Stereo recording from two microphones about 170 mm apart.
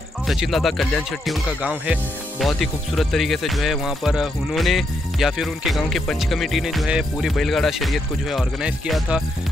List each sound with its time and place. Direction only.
0.3 s speech: centre (ahead or behind)